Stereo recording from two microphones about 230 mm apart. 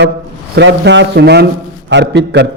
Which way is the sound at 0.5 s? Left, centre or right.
Right.